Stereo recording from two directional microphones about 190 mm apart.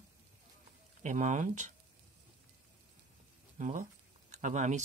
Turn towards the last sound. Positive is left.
turn(degrees=-40)  # may be behind; listen again after turning